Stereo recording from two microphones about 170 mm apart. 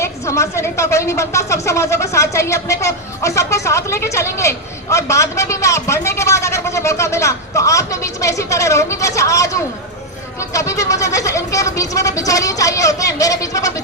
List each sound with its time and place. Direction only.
0.0 s a woman's voice: 15° left (ahead or behind)